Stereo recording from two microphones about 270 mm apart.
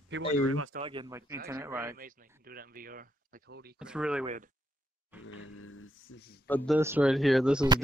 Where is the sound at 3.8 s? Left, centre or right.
Centre.